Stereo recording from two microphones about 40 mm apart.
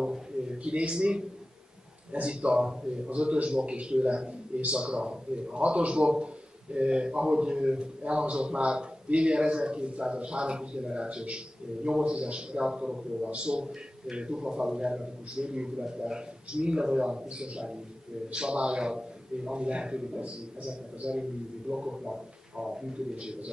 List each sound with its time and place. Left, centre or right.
0.0 s a sound: centre
2.1 s a man's voice: right
13.3 s a man's voice: right